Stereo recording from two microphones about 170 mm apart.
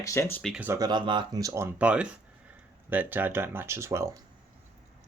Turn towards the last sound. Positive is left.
turn(degrees=-15)  # may be behind; listen again after turning